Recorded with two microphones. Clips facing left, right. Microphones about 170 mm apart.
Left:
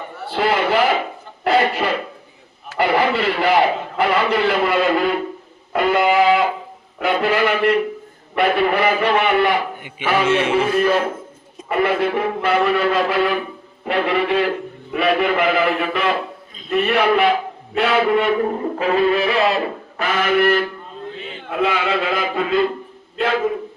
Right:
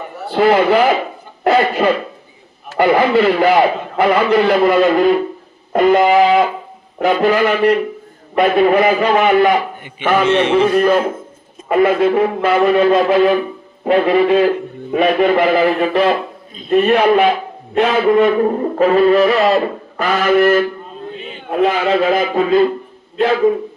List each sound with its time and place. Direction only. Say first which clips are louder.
0.3 s a man's voice: right 7 dB; 45° right (ahead or behind)
1.5 s a sound: right 4 dB; 45° right (ahead or behind)
2.7 s a man's voice: right 6 dB; 45° right (ahead or behind)
5.7 s music: right 5 dB; 40° right (ahead or behind)
7.0 s a man's voice: right 5 dB; 45° right (ahead or behind)
10.2 s a man's voice: right 4 dB; 5° left (ahead or behind)
10.6 s a man's voice: right 5 dB; 45° right (ahead or behind)